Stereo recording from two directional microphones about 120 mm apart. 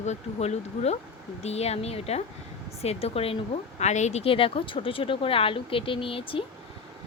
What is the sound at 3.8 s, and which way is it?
Speech, 75° left (ahead or behind).